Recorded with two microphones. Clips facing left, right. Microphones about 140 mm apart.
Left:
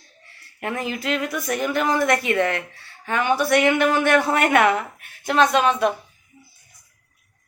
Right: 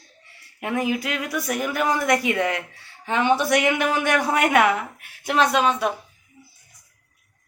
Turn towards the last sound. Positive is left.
turn(degrees=-5)  # may be behind; listen again after turning